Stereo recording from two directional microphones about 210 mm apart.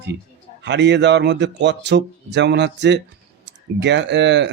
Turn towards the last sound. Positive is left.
turn(degrees=-55)  # may be behind; listen again after turning